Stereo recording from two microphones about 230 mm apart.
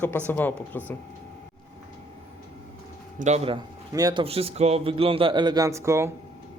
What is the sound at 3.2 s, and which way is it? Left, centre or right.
Speech, right.